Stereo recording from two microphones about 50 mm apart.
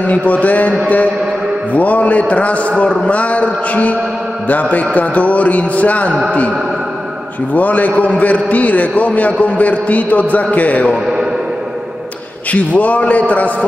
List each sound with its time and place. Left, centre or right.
0.0 s a man's voice: left
7.5 s a man's voice: left
12.5 s a man's voice: left